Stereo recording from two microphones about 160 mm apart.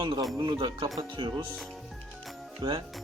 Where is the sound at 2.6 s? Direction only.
25° right (ahead or behind).